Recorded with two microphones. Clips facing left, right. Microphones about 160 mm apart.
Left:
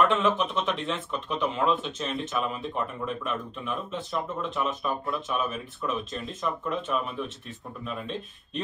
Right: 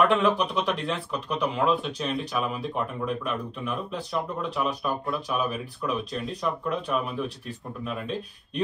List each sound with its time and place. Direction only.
0.0 s speech: centre (ahead or behind)